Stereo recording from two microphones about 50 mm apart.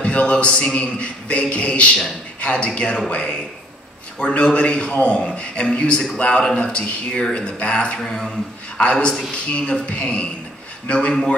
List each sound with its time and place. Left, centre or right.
0.0 s a man's voice: left
4.4 s a man's voice: left
8.0 s speech: centre
8.7 s a man's voice: left